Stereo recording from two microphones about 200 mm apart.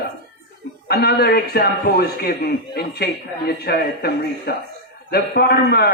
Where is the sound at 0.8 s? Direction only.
50° left (ahead or behind).